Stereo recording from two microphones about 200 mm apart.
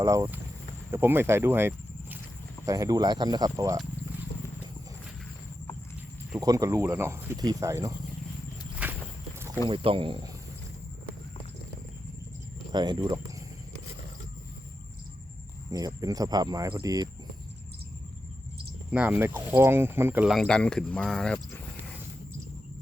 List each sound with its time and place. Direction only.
0.0 s speech: 15° right (ahead or behind)
6.4 s speech: 15° right (ahead or behind)
9.6 s speech: 25° right (ahead or behind)
12.7 s speech: 20° right (ahead or behind)
15.7 s speech: 20° right (ahead or behind)
18.9 s speech: 5° right (ahead or behind)
20.3 s speech: 5° left (ahead or behind)